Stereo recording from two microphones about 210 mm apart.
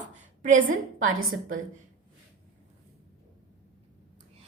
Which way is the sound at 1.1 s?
75° right (ahead or behind).